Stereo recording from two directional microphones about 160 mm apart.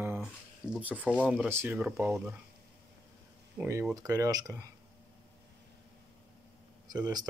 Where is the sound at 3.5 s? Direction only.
15° right (ahead or behind).